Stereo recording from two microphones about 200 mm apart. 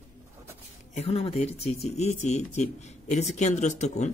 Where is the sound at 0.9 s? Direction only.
30° left (ahead or behind).